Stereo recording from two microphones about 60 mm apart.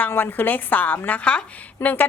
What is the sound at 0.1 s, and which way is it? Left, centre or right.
A woman's voice, left.